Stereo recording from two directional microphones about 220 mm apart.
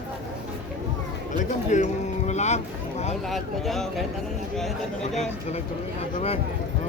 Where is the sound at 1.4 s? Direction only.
35° left (ahead or behind).